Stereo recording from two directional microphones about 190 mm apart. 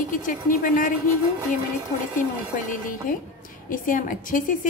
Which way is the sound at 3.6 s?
45° left (ahead or behind).